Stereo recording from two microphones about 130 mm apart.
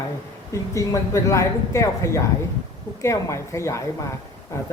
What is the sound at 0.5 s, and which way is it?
Speech, 25° left (ahead or behind).